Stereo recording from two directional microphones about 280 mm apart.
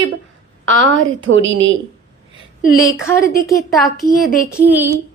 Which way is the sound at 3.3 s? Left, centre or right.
Centre.